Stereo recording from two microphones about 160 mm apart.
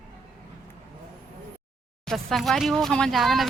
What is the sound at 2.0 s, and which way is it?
A woman's voice, centre (ahead or behind).